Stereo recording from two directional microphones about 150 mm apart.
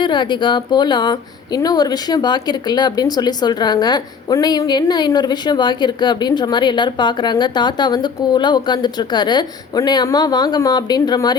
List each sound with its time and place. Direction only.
0.0 s speech: 30° left (ahead or behind)